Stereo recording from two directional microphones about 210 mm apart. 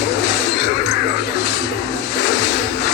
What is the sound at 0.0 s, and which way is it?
Music, 55° left (ahead or behind).